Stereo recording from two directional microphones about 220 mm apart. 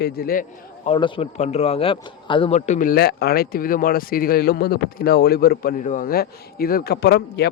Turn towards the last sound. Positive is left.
turn(degrees=50)  # may be behind; listen again after turning